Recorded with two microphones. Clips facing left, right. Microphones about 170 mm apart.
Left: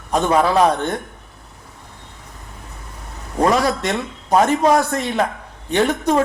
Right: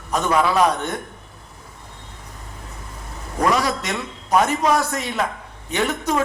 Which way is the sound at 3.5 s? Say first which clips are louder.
Left 4 dB; 40° left (ahead or behind).